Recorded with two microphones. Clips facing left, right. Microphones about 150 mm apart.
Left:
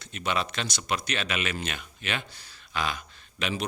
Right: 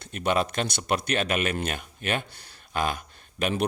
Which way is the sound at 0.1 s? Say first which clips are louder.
Right 5 dB; 50° right (ahead or behind).